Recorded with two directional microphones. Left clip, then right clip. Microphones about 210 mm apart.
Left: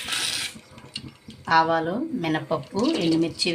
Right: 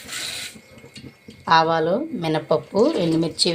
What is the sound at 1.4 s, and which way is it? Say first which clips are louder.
A woman's voice: right 3 dB; 15° right (ahead or behind).